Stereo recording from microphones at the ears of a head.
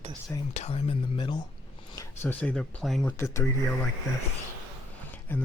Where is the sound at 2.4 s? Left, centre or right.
Centre.